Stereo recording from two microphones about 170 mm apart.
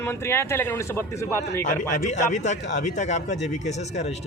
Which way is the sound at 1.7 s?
45° left (ahead or behind).